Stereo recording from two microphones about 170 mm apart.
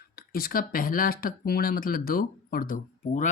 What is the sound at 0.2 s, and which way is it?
Speech, 60° left (ahead or behind).